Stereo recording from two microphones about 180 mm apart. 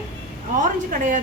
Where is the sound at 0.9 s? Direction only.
45° right (ahead or behind).